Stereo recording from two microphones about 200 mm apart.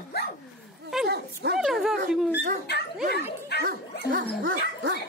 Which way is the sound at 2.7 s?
55° left (ahead or behind).